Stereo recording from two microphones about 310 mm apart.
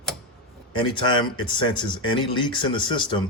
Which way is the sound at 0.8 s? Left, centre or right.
Centre.